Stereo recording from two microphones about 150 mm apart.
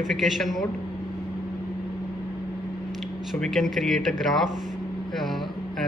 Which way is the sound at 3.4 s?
Centre (ahead or behind).